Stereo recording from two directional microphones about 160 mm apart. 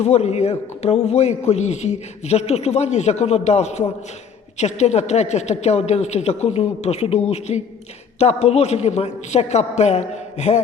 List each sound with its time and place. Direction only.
0.0 s a man's voice: 40° left (ahead or behind)